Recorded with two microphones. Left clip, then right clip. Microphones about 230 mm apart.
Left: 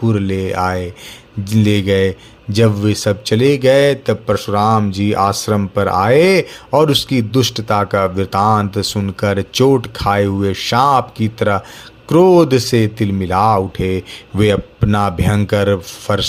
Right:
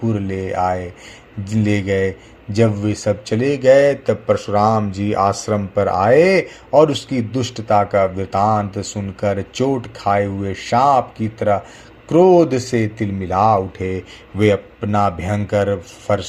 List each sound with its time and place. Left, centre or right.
0.0 s a man's voice: left